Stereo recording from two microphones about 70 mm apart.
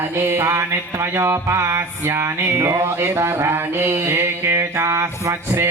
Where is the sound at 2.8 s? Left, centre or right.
Right.